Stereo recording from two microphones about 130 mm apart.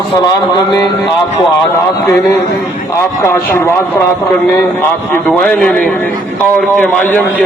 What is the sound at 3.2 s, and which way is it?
Speech, 20° left (ahead or behind).